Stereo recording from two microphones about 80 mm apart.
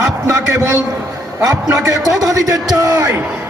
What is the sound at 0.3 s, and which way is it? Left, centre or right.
A man's voice, right.